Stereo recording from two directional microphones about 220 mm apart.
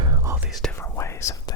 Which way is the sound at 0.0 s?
10° right (ahead or behind).